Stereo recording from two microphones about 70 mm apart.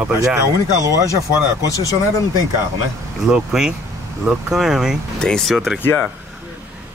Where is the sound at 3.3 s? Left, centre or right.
Centre.